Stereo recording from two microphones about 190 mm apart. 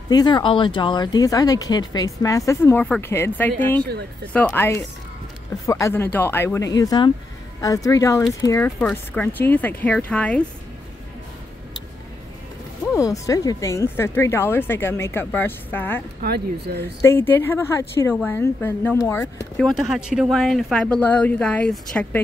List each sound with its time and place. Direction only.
0.1 s speech: 25° left (ahead or behind); by 10.4 s 5° left (ahead or behind)
13.3 s speech: 20° left (ahead or behind)
16.2 s speech: 55° right (ahead or behind)
17.0 s speech: 10° left (ahead or behind)